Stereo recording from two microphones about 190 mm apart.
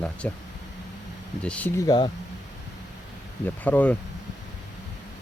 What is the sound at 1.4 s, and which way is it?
Speech, 5° left (ahead or behind).